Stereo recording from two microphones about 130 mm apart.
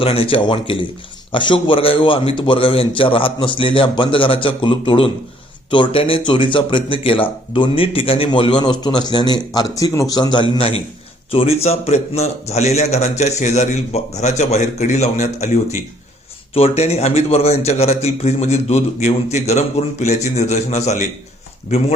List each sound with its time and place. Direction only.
0.0 s speech: 45° left (ahead or behind); by 10.2 s 25° left (ahead or behind)
10.3 s a man's voice: 40° left (ahead or behind); by 15.6 s 65° left (ahead or behind)
16.6 s a man's voice: 50° left (ahead or behind)